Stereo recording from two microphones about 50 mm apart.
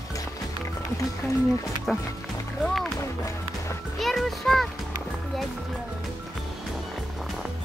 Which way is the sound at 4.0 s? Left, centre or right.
Centre.